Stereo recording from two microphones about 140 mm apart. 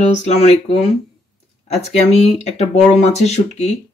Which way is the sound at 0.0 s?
60° left (ahead or behind).